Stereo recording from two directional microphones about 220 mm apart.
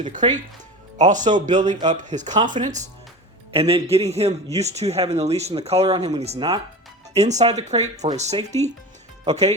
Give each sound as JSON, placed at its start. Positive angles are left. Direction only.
{"t": 0.2, "sound": "speech", "side_deg": -25}